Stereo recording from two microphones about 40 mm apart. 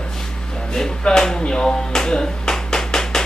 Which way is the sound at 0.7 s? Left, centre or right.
Centre.